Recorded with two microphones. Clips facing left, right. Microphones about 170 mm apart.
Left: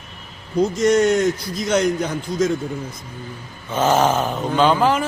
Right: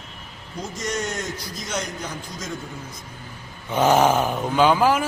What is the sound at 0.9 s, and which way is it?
Speech, 60° left (ahead or behind).